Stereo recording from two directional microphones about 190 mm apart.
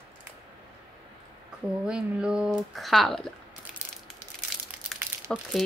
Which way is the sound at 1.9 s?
5° right (ahead or behind).